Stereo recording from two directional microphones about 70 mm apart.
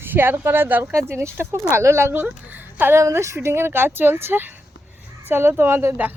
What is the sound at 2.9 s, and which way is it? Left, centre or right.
Speech, right.